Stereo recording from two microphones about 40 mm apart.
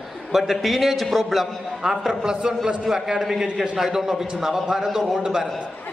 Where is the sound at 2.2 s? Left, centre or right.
Centre.